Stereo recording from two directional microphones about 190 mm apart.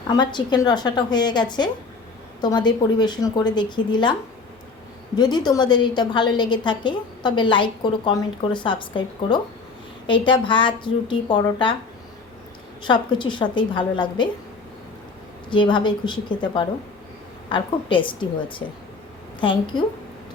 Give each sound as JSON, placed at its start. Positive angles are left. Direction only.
{"t": 0.2, "sound": "a woman's voice", "side_deg": 25}
{"t": 5.1, "sound": "a woman's voice", "side_deg": 20}
{"t": 12.8, "sound": "a woman's voice", "side_deg": 25}
{"t": 15.4, "sound": "a woman's voice", "side_deg": 25}